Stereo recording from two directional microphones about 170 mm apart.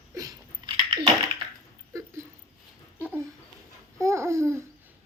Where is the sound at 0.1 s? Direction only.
20° right (ahead or behind).